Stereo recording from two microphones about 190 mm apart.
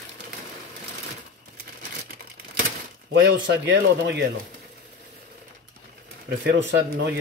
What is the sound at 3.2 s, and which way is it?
Speech, 65° right (ahead or behind).